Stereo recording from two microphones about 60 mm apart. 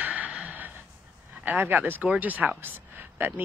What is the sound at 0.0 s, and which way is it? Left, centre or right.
Gasp, right.